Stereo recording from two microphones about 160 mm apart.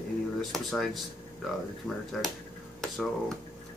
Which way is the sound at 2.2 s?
Centre (ahead or behind).